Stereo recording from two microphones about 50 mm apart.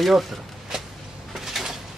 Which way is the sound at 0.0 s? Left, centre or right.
Centre.